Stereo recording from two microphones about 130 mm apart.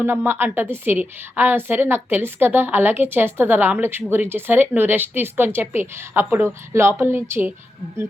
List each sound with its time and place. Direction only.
0.3 s a woman's voice: 15° right (ahead or behind)